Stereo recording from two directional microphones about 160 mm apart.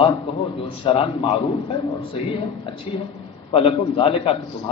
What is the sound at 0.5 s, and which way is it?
A man's voice, 30° left (ahead or behind).